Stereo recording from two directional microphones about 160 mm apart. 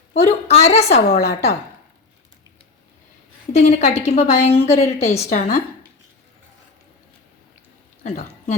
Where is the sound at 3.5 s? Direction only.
45° left (ahead or behind).